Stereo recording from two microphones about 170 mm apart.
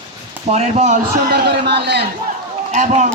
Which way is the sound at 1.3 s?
75° right (ahead or behind).